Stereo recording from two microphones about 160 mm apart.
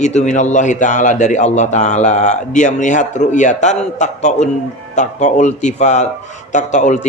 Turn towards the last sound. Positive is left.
turn(degrees=50)  # may be behind; listen again after turning